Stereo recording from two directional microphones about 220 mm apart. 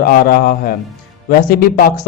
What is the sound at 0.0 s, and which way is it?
A man's voice, 40° left (ahead or behind).